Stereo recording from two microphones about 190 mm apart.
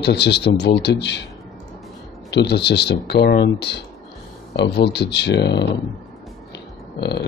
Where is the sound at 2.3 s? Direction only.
60° left (ahead or behind).